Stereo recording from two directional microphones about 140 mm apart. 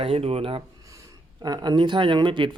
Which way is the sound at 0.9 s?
25° right (ahead or behind).